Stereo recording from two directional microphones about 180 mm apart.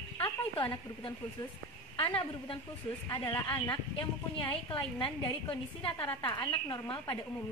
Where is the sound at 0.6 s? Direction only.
25° left (ahead or behind).